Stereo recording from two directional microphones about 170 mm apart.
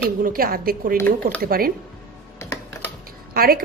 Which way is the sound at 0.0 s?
55° right (ahead or behind).